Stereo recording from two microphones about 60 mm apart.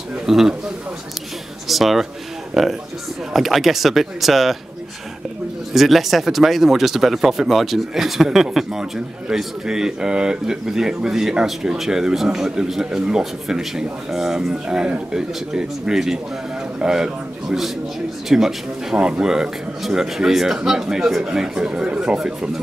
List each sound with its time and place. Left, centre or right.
0.1 s a man's voice: centre
1.7 s a man's voice: centre
5.7 s a man's voice: centre